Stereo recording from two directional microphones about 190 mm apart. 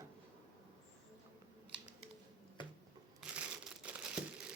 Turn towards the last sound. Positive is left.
turn(degrees=-5)  # may be behind; listen again after turning